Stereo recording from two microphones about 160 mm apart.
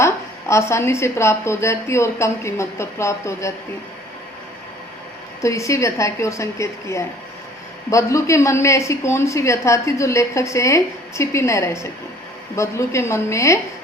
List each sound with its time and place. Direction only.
0.0 s a woman's voice: 15° left (ahead or behind)
5.4 s a woman's voice: 20° left (ahead or behind)